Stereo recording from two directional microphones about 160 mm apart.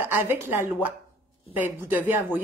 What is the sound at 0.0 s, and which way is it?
Speech, 10° right (ahead or behind).